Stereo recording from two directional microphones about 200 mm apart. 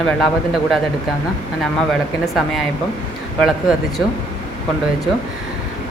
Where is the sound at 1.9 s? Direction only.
Centre (ahead or behind).